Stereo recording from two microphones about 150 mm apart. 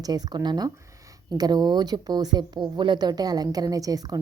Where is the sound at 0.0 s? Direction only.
25° right (ahead or behind).